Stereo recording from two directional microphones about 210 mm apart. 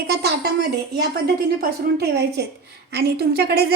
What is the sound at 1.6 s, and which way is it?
A woman's voice, 50° right (ahead or behind).